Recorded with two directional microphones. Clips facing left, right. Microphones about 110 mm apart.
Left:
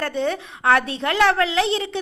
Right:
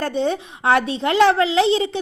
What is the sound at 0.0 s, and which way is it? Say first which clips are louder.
A woman's voice: right 2 dB; 20° right (ahead or behind).